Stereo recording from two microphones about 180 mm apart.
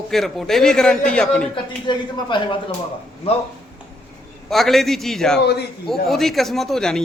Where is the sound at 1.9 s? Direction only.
25° left (ahead or behind).